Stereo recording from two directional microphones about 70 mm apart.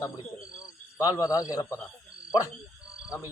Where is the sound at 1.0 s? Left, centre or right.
Left.